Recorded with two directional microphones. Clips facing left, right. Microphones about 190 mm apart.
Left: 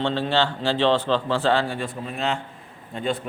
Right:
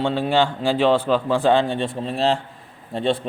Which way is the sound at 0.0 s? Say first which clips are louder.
Right 3 dB; 10° right (ahead or behind).